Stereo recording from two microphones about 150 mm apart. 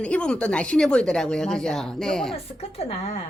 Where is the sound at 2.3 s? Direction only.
40° left (ahead or behind).